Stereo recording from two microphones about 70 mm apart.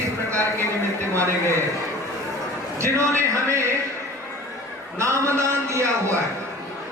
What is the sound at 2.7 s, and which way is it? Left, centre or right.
A man's voice, right.